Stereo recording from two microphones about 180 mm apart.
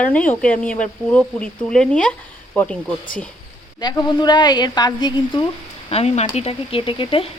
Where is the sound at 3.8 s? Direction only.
25° left (ahead or behind).